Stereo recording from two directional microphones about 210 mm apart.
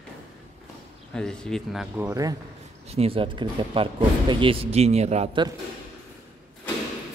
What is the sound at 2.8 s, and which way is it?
Speech, 30° right (ahead or behind).